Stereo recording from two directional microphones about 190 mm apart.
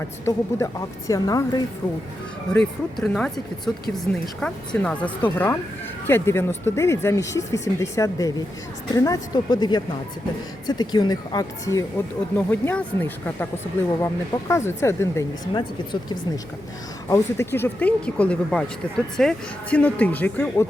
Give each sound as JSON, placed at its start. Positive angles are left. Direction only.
{"t": 0.3, "sound": "speech", "side_deg": 15}
{"t": 2.5, "sound": "speech", "side_deg": 5}